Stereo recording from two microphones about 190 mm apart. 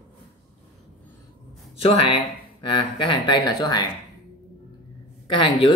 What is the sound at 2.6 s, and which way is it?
Speech, 25° left (ahead or behind).